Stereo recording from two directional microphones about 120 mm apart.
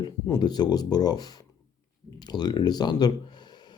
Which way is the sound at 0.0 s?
35° left (ahead or behind).